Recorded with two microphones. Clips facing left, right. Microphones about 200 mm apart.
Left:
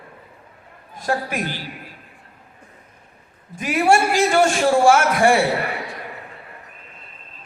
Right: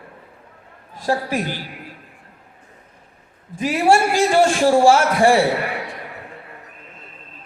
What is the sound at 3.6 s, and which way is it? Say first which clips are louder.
A man's voice: right 1 dB; 30° right (ahead or behind).